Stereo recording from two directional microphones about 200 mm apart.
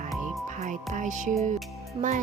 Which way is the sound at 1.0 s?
40° right (ahead or behind).